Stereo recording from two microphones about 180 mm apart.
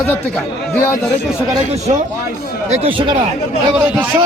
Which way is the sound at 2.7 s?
30° right (ahead or behind).